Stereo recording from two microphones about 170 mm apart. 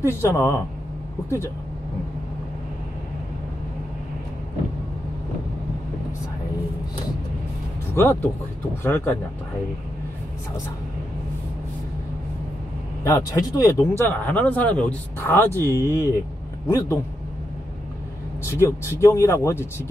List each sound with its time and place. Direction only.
0.1 s speech: 15° left (ahead or behind)
7.9 s speech: 15° left (ahead or behind)
13.0 s speech: 20° left (ahead or behind)
18.4 s speech: 15° left (ahead or behind)